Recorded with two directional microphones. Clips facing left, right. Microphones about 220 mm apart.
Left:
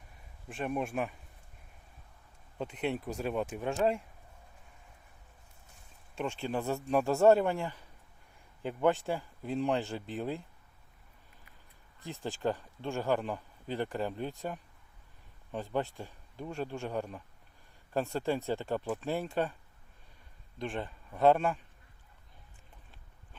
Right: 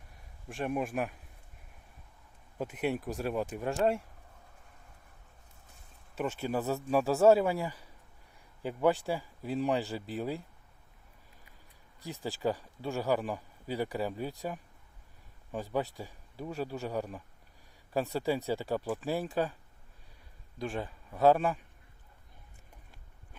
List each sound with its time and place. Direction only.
0.4 s speech: centre (ahead or behind)
2.6 s speech: 5° right (ahead or behind)
6.1 s speech: 5° right (ahead or behind)
12.0 s speech: centre (ahead or behind)
20.6 s speech: 5° right (ahead or behind)